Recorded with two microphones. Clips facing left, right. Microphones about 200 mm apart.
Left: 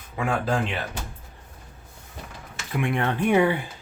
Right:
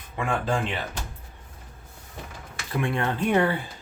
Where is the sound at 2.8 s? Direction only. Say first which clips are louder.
Left 1 dB; 15° left (ahead or behind).